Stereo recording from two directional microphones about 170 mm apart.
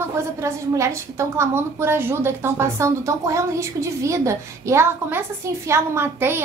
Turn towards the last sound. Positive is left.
turn(degrees=-15)  # may be behind; listen again after turning